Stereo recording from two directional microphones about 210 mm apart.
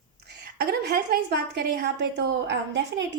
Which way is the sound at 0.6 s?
50° right (ahead or behind).